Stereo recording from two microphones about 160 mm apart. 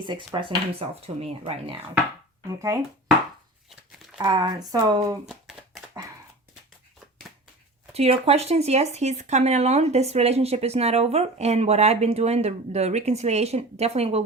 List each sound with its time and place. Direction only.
0.0 s speech: 30° right (ahead or behind)
4.2 s speech: 25° right (ahead or behind)
5.2 s shuffling cards: centre (ahead or behind)
7.9 s speech: 40° right (ahead or behind)